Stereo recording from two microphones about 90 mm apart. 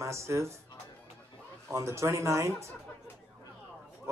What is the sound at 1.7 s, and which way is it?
Speech, 35° right (ahead or behind).